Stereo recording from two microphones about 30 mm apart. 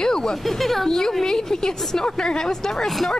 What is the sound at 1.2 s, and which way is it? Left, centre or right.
A woman's voice, centre.